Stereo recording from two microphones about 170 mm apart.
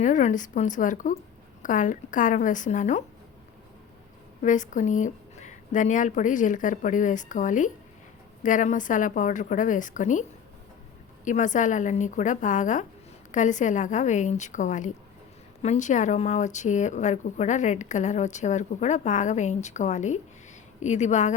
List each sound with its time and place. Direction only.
0.0 s speech: 45° left (ahead or behind)
4.4 s speech: 45° left (ahead or behind)
11.3 s speech: 45° left (ahead or behind)